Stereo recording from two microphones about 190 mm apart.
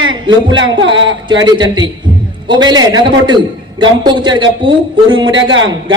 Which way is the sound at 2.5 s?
20° right (ahead or behind).